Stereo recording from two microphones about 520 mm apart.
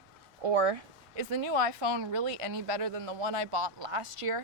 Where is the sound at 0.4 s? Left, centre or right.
Right.